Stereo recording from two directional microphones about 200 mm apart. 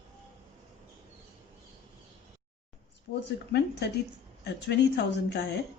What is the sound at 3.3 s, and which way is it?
A woman's voice, 60° left (ahead or behind).